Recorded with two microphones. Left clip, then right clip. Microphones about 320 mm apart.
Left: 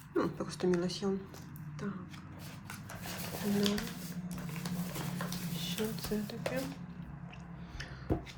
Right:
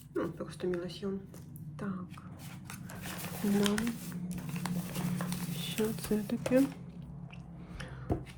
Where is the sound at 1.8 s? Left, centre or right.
Centre.